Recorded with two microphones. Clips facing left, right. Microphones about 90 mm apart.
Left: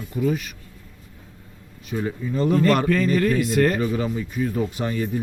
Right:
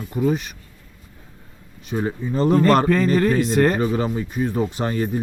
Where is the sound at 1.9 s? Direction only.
30° right (ahead or behind).